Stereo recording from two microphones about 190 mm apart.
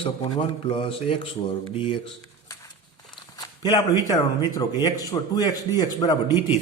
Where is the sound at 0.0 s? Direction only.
30° left (ahead or behind).